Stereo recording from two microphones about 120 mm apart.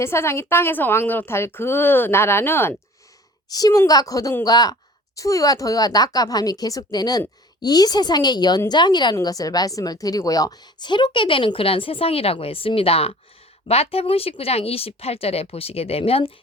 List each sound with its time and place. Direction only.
0.0 s a woman's voice: 20° left (ahead or behind)
3.5 s a woman's voice: 30° left (ahead or behind); by 16.3 s 55° left (ahead or behind)